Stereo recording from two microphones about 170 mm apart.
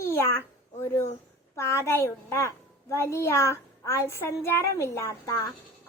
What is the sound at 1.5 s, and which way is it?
A woman's voice, 15° left (ahead or behind).